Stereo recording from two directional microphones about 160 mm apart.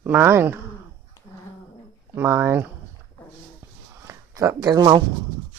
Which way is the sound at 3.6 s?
20° right (ahead or behind).